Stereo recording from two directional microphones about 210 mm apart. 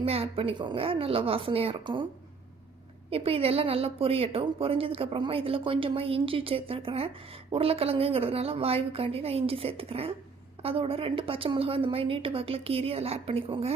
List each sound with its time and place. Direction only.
0.0 s a woman's voice: 25° right (ahead or behind)
3.1 s a woman's voice: 25° right (ahead or behind)